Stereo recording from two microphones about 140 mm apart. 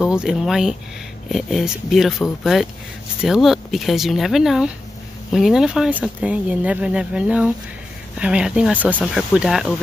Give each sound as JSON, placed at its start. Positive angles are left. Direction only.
{"t": 0.0, "sound": "speech", "side_deg": -5}